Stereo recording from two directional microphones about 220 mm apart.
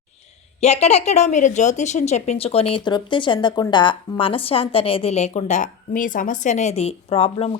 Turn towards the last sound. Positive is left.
turn(degrees=25)  # may be behind; listen again after turning